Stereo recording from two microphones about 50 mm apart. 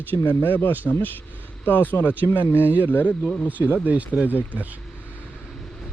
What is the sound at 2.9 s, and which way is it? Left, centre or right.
Speech, left.